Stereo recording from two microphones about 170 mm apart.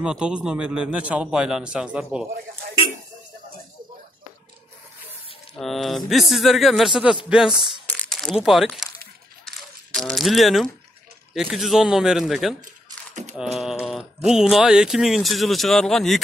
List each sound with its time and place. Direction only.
0.0 s speech: 5° right (ahead or behind)
5.6 s speech: centre (ahead or behind)
7.9 s crumpling: 5° left (ahead or behind)
9.9 s speech: centre (ahead or behind)
13.1 s a sound: 40° right (ahead or behind)
13.4 s speech: centre (ahead or behind)